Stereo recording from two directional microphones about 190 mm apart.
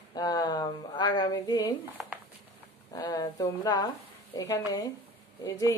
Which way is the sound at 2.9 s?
20° left (ahead or behind).